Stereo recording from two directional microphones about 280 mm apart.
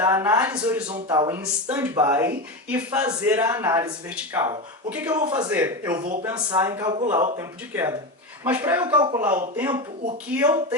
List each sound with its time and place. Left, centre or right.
0.0 s a man's voice: centre
0.9 s a man's voice: centre